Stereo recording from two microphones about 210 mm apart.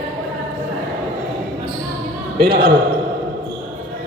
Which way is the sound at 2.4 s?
45° right (ahead or behind).